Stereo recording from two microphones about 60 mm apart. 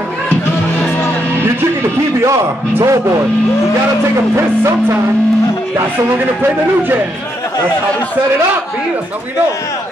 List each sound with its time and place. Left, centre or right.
2.8 s speech: right